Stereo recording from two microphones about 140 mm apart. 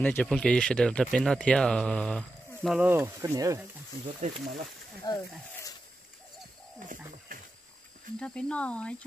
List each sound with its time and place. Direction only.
0.0 s speech: 10° left (ahead or behind)
2.8 s speech: 15° right (ahead or behind)
4.2 s speech: 60° right (ahead or behind)
5.1 s speech: 30° left (ahead or behind)
5.5 s a sound: 20° left (ahead or behind)
7.3 s wild animals: 80° right
8.2 s speech: 5° left (ahead or behind)